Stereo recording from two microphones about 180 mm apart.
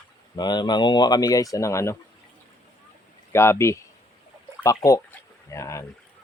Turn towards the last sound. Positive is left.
turn(degrees=15)  # may be behind; listen again after turning